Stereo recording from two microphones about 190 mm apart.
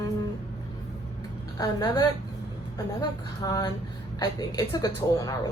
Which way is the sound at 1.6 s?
20° left (ahead or behind).